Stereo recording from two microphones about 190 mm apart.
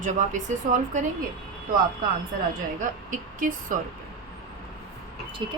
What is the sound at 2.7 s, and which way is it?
Speech, 45° right (ahead or behind).